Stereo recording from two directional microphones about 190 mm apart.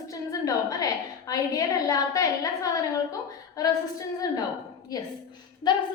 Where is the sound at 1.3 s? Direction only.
20° left (ahead or behind).